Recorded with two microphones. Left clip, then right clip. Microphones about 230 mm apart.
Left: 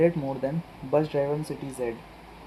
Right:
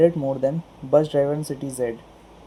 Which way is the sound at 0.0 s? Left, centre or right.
Right.